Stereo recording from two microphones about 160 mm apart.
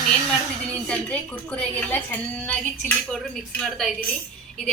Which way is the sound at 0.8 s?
5° left (ahead or behind).